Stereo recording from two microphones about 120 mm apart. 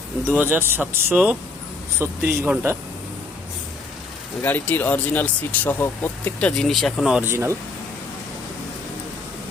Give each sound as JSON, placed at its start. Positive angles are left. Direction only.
{"t": 0.3, "sound": "speech", "side_deg": -15}
{"t": 4.4, "sound": "speech", "side_deg": 15}
{"t": 7.2, "sound": "speech", "side_deg": -20}